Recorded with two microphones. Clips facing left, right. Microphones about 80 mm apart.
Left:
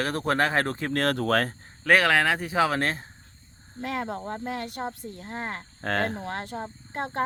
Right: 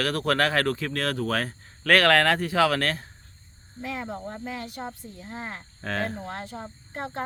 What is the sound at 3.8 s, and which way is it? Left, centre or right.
Speech, left.